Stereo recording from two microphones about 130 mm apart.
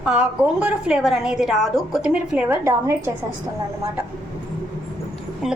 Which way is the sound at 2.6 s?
25° right (ahead or behind).